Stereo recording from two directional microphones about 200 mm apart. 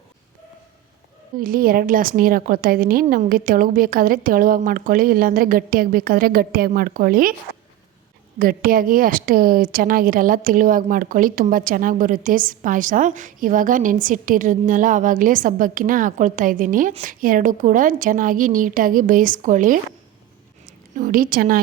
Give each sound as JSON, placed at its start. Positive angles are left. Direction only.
{"t": 1.4, "sound": "a woman's voice", "side_deg": -45}
{"t": 8.4, "sound": "a woman's voice", "side_deg": -45}